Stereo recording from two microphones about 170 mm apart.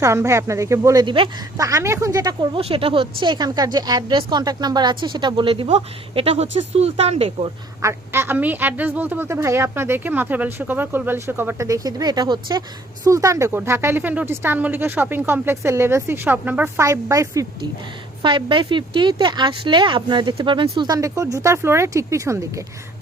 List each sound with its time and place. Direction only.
0.0 s a woman's voice: 15° right (ahead or behind)
1.6 s speech: 20° right (ahead or behind); by 7.5 s 35° right (ahead or behind)
7.8 s a woman's voice: 15° right (ahead or behind)